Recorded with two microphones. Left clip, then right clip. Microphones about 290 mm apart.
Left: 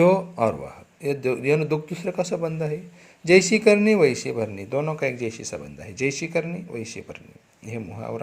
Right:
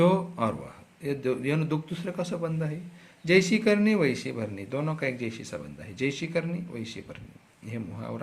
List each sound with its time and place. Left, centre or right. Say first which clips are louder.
0.0 s a man's voice: left 6 dB; centre